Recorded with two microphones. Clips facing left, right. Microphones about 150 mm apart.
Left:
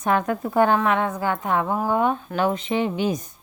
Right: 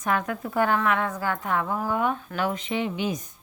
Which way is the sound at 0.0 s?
30° left (ahead or behind).